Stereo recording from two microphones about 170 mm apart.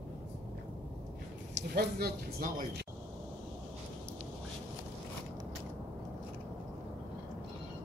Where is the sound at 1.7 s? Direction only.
60° right (ahead or behind).